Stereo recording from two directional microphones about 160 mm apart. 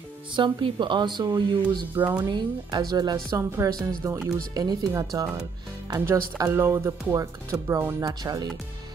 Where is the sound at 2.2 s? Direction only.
25° right (ahead or behind).